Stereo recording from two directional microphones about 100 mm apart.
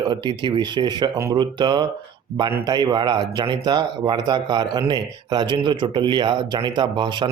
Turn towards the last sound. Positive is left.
turn(degrees=-50)  # may be behind; listen again after turning